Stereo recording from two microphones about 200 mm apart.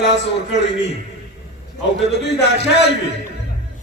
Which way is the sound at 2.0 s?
60° left (ahead or behind).